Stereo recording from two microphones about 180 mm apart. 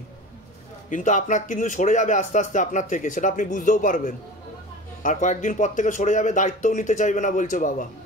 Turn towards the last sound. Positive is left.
turn(degrees=45)  # may be behind; listen again after turning